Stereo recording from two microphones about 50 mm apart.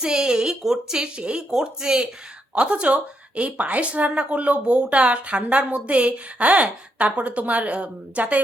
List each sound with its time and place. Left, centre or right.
0.0 s speech: centre
2.6 s a woman's voice: right